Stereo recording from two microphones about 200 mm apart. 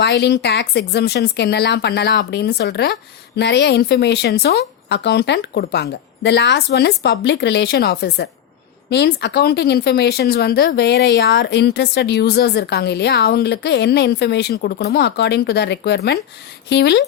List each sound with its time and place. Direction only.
0.0 s speech: 60° left (ahead or behind)